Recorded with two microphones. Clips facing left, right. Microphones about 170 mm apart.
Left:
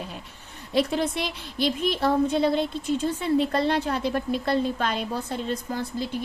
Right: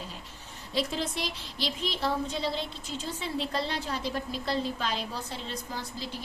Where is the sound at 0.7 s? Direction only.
60° left (ahead or behind).